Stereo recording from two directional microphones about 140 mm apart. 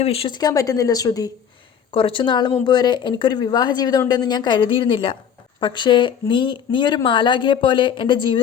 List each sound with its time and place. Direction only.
0.0 s speech: 45° left (ahead or behind); by 1.3 s 25° left (ahead or behind)
1.9 s speech: 40° left (ahead or behind)